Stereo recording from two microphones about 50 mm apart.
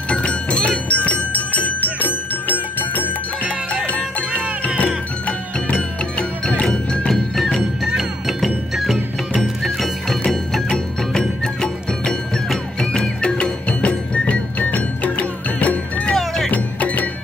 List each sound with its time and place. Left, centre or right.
0.1 s music: left
5.2 s music: centre
7.9 s music: centre
9.6 s music: centre
10.7 s music: centre; by 17.1 s left